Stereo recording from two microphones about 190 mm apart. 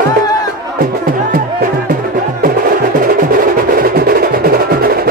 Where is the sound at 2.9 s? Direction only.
45° right (ahead or behind).